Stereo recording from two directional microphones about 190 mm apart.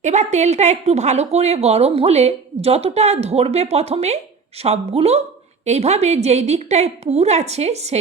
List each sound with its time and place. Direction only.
0.0 s speech: 40° right (ahead or behind)